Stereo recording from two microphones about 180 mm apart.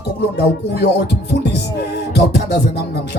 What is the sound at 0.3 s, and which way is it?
Music, 65° left (ahead or behind).